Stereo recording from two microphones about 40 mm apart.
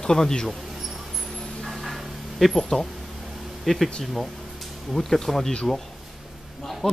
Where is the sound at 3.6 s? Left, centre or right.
Centre.